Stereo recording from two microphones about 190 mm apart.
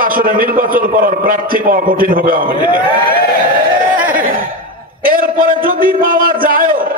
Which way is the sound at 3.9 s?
10° right (ahead or behind).